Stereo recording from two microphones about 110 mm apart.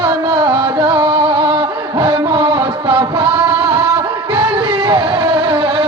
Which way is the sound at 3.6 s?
30° right (ahead or behind).